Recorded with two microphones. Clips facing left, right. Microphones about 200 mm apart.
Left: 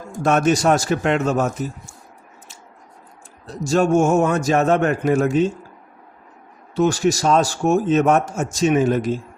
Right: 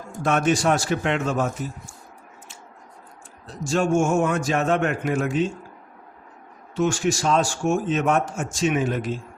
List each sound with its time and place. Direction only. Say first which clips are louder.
0.2 s a man's voice: left 4 dB; 45° left (ahead or behind)
3.4 s a man's voice: left 5 dB; 40° left (ahead or behind)
6.7 s a man's voice: left 4 dB; 35° left (ahead or behind)